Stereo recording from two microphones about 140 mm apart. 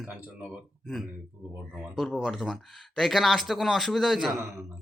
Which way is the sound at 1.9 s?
5° left (ahead or behind).